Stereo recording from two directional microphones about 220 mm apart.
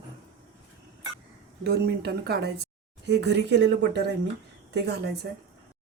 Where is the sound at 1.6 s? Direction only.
45° right (ahead or behind).